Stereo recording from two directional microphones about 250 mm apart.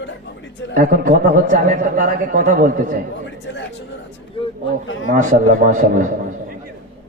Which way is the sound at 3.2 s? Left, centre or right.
Left.